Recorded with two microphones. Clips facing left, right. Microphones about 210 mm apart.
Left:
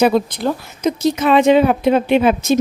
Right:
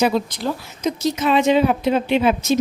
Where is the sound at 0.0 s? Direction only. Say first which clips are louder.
Left 5 dB; 55° left (ahead or behind).